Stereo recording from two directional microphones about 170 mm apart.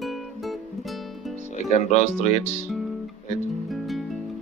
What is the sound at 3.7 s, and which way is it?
Music, centre (ahead or behind).